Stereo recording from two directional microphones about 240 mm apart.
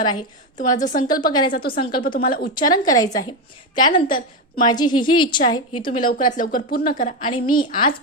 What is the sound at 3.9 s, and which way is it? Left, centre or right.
Speech, left.